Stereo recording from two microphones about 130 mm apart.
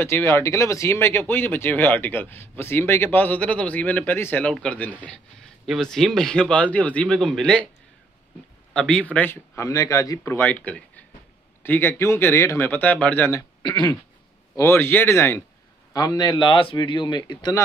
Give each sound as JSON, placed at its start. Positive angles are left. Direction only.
{"t": 0.0, "sound": "speech", "side_deg": 20}
{"t": 8.7, "sound": "speech", "side_deg": 5}
{"t": 14.6, "sound": "speech", "side_deg": 20}
{"t": 15.9, "sound": "a man's voice", "side_deg": 30}